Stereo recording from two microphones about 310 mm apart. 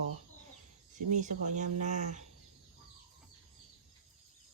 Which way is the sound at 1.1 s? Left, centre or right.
Right.